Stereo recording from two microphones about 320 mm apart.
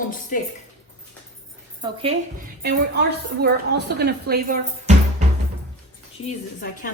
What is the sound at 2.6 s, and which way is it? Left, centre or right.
A woman's voice, right.